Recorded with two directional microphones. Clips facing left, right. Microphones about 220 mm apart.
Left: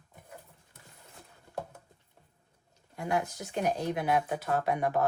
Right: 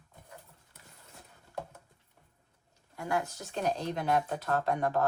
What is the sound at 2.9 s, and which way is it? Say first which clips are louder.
Speech: left 2 dB; 20° left (ahead or behind).